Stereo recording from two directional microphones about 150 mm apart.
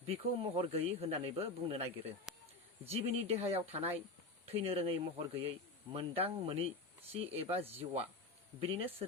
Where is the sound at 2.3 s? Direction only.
5° right (ahead or behind).